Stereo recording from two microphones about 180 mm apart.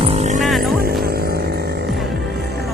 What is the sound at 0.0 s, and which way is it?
Vehicle, 35° right (ahead or behind).